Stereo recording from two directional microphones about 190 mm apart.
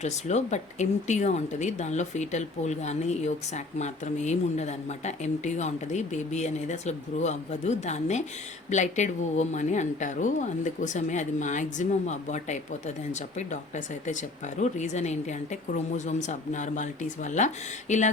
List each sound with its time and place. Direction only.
0.0 s speech: 35° left (ahead or behind)